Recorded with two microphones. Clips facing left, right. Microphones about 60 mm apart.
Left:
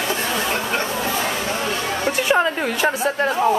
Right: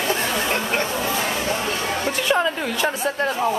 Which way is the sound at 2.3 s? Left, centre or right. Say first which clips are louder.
Left 2 dB; centre.